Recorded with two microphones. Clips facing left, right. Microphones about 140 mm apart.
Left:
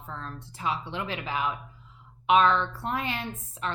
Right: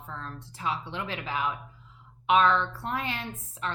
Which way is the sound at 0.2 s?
15° left (ahead or behind).